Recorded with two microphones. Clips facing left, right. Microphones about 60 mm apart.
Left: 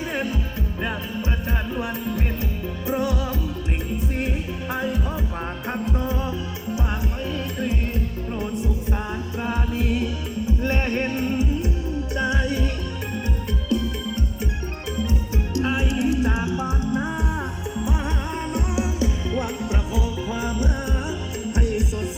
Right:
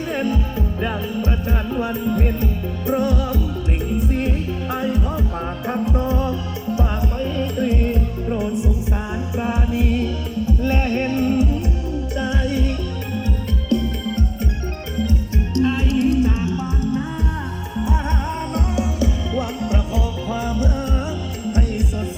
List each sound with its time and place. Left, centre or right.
0.1 s music: centre
4.7 s music: centre
6.7 s music: centre
9.8 s music: centre
10.4 s music: centre
15.5 s music: centre
18.5 s music: left